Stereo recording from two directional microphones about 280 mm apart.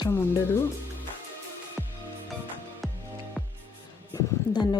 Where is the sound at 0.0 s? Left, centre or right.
Centre.